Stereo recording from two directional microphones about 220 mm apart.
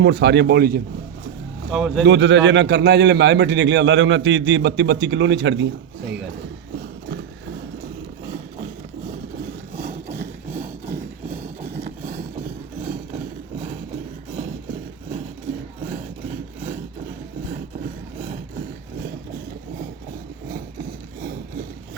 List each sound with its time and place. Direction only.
0.0 s a man's voice: 50° right (ahead or behind)
1.7 s speech: centre (ahead or behind)
2.0 s a man's voice: 55° right (ahead or behind)
11.3 s vehicle: 10° right (ahead or behind)